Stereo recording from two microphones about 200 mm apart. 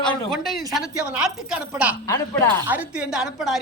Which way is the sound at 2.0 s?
15° left (ahead or behind).